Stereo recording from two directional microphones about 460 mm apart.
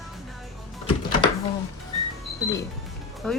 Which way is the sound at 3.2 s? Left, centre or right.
Centre.